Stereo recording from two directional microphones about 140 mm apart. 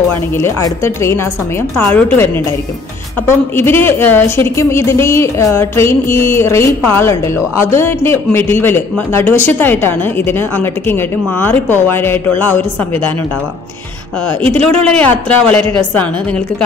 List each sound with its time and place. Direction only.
0.1 s a woman's voice: 20° left (ahead or behind)
3.5 s a woman's voice: 15° left (ahead or behind)
14.2 s a woman's voice: 10° left (ahead or behind)